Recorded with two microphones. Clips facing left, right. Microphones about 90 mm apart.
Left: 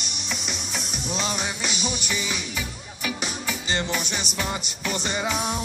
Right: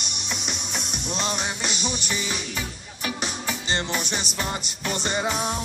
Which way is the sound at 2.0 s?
40° right (ahead or behind).